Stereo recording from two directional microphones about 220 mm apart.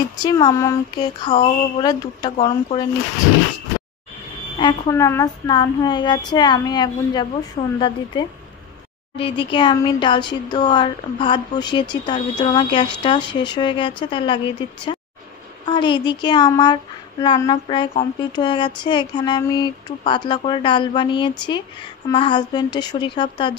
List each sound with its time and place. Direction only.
0.2 s speech: 20° left (ahead or behind)
4.6 s speech: 20° left (ahead or behind)
15.6 s speech: 20° left (ahead or behind)